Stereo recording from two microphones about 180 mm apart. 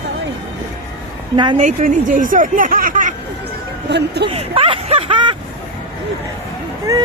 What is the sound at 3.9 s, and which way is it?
Speech, 70° right (ahead or behind).